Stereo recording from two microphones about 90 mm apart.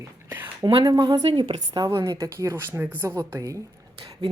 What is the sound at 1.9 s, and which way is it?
Speech, 35° right (ahead or behind).